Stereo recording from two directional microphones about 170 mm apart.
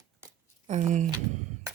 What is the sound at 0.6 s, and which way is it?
Speech, 45° right (ahead or behind).